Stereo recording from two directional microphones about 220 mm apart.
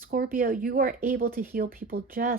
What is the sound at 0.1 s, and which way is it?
Speech, 40° right (ahead or behind).